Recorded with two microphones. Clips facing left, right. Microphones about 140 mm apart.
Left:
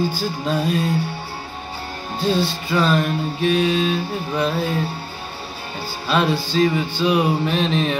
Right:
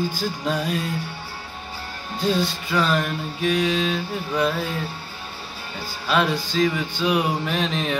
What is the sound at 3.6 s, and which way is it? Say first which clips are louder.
Mantra: left 3 dB; 80° right.